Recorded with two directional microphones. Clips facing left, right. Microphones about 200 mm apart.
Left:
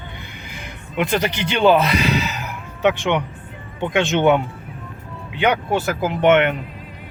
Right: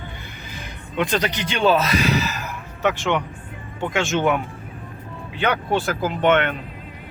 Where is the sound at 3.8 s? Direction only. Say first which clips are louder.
Left 3 dB; 20° left (ahead or behind).